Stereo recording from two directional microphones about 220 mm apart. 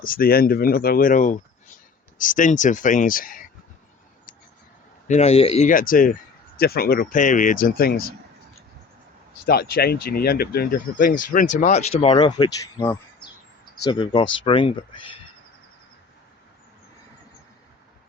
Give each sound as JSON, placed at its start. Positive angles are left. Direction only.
{"t": 0.0, "sound": "speech", "side_deg": 40}
{"t": 5.0, "sound": "speech", "side_deg": 30}
{"t": 9.5, "sound": "speech", "side_deg": 45}
{"t": 11.6, "sound": "speech", "side_deg": 30}